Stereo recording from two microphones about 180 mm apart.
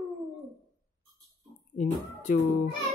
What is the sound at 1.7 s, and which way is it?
Speech, 45° left (ahead or behind).